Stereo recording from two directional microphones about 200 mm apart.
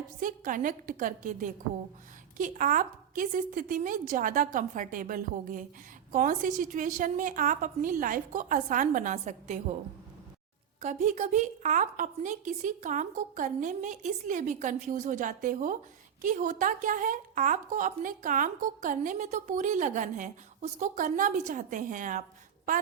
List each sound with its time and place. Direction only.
0.2 s a woman's voice: 40° right (ahead or behind)
10.8 s a woman's voice: 35° right (ahead or behind)